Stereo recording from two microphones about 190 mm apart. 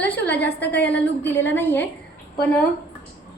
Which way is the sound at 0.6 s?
60° left (ahead or behind).